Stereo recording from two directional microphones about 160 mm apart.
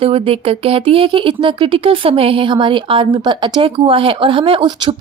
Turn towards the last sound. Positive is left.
turn(degrees=-30)  # may be behind; listen again after turning